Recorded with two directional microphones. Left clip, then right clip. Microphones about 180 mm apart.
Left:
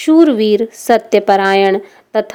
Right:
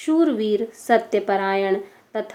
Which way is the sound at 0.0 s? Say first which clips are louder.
Left 10 dB; 55° left (ahead or behind).